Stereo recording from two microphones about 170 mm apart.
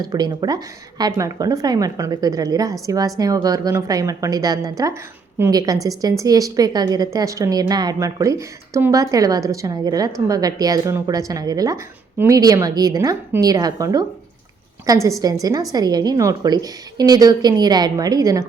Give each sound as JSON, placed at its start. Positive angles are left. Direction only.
{"t": 0.0, "sound": "a woman's voice", "side_deg": -25}